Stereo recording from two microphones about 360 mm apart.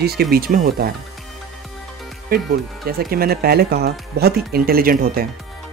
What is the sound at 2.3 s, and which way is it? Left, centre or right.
Speech, right.